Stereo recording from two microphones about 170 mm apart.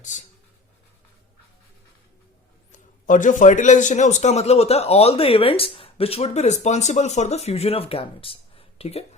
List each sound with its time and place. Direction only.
2.7 s a man's voice: 50° left (ahead or behind)